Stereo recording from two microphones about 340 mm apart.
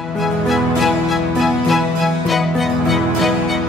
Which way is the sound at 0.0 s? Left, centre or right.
Centre.